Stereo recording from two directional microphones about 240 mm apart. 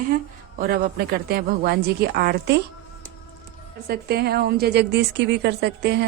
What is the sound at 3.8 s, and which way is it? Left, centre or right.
A woman's voice, right.